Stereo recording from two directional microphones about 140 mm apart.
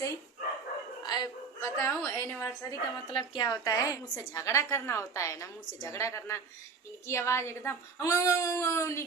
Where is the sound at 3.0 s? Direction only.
35° left (ahead or behind).